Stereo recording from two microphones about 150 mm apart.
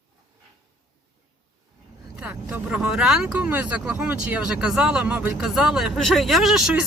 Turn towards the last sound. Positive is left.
turn(degrees=-5)  # may be behind; listen again after turning